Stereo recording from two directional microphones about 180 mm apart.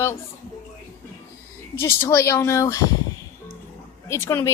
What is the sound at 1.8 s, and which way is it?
A woman's voice, 15° left (ahead or behind).